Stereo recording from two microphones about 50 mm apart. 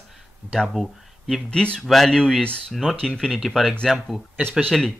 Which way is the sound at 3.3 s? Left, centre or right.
Centre.